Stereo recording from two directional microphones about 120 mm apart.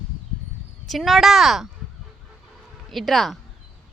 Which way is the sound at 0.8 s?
Centre (ahead or behind).